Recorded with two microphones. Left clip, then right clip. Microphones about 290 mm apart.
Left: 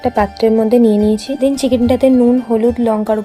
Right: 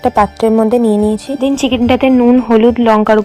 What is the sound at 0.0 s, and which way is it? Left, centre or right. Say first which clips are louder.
Speech: right 3 dB; right.